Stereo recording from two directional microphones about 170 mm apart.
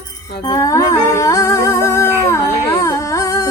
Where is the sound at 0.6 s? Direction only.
20° left (ahead or behind).